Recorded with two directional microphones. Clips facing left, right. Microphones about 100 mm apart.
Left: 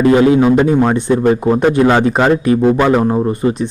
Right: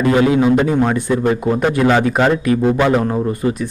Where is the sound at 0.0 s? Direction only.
30° left (ahead or behind).